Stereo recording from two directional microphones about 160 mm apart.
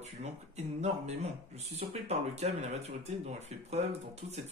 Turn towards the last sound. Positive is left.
turn(degrees=-40)  # may be behind; listen again after turning